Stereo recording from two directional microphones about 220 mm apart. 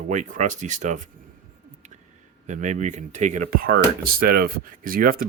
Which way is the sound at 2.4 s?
35° right (ahead or behind).